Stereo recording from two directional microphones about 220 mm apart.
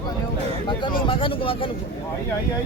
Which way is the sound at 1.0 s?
25° left (ahead or behind).